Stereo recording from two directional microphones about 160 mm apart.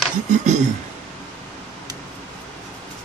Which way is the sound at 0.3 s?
45° right (ahead or behind).